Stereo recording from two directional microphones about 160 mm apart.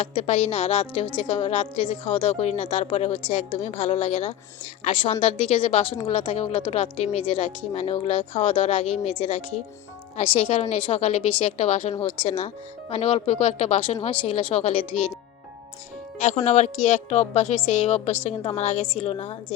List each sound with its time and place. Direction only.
0.0 s a woman's voice: 35° left (ahead or behind)
16.1 s speech: 45° left (ahead or behind)